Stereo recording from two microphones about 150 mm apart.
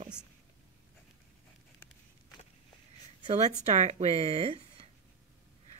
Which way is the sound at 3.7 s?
50° right (ahead or behind).